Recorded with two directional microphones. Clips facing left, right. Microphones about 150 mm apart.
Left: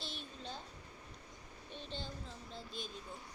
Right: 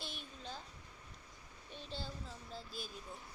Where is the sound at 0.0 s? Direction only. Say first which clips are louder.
Left 1 dB; 10° right (ahead or behind).